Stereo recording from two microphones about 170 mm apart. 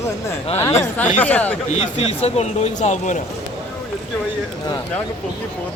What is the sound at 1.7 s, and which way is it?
Speech, 40° left (ahead or behind).